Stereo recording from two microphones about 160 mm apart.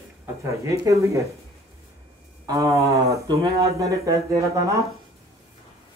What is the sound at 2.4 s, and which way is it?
Speech, 20° right (ahead or behind).